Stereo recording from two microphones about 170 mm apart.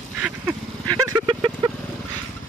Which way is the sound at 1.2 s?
30° right (ahead or behind).